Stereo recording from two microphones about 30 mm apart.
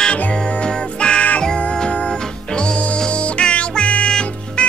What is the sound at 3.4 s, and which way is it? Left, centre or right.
Music, left.